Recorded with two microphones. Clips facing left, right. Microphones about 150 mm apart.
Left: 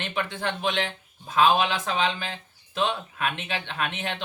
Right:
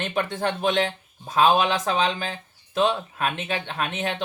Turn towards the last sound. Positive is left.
turn(degrees=-40)  # may be behind; listen again after turning